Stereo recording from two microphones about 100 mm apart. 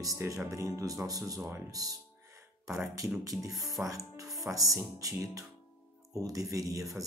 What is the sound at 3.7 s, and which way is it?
Speech, 35° right (ahead or behind).